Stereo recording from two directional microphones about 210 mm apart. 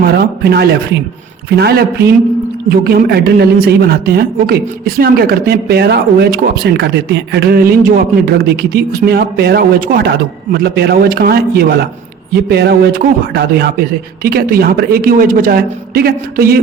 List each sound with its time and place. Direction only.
0.0 s a woman's voice: 50° right (ahead or behind)